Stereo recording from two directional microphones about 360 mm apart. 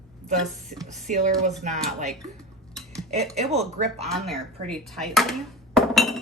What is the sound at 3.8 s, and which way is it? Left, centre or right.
Speech, centre.